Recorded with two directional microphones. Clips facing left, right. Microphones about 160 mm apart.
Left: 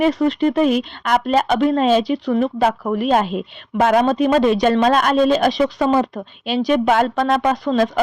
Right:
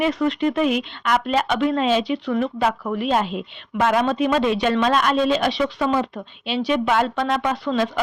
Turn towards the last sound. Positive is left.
turn(degrees=40)  # may be behind; listen again after turning